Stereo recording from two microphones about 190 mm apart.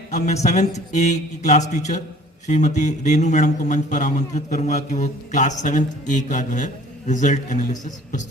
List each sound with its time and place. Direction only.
0.1 s speech: 35° left (ahead or behind)